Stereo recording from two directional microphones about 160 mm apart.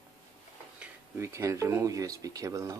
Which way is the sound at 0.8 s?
15° right (ahead or behind).